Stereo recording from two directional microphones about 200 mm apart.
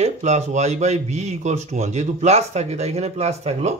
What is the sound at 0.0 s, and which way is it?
Speech, 35° right (ahead or behind).